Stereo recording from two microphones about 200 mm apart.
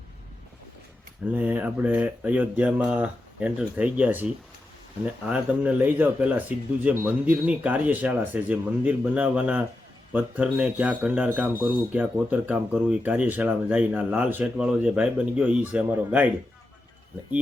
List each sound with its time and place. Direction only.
1.3 s speech: 10° right (ahead or behind)